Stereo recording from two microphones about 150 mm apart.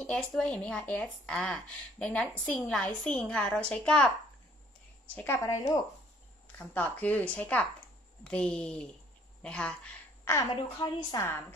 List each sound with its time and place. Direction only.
0.0 s speech: 5° left (ahead or behind)
10.5 s a woman's voice: 30° left (ahead or behind)